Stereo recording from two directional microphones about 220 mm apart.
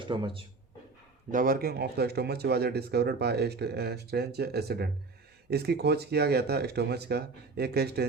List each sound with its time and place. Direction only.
0.0 s speech: 20° right (ahead or behind)
1.3 s speech: 40° right (ahead or behind)